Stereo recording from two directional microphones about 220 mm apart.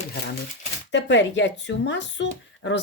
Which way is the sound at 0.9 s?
55° left (ahead or behind).